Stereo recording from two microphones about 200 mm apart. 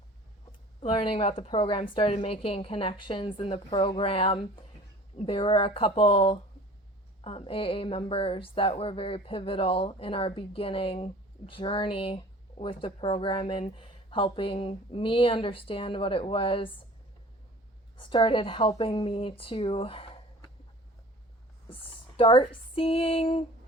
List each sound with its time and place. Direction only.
0.8 s speech: 30° left (ahead or behind)
17.9 s speech: 25° left (ahead or behind)
22.2 s speech: 25° left (ahead or behind)